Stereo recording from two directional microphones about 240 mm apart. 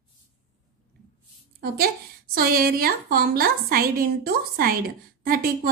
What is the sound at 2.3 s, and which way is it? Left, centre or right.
A woman's voice, right.